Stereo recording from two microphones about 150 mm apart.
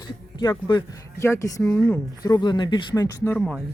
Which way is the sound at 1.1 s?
20° left (ahead or behind).